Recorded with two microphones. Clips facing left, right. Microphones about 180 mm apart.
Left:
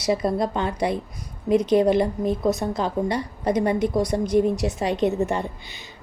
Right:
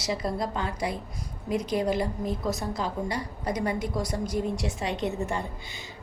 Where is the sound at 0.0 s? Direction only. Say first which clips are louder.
Left 7 dB; 20° left (ahead or behind).